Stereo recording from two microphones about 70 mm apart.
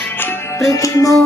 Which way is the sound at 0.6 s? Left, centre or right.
Left.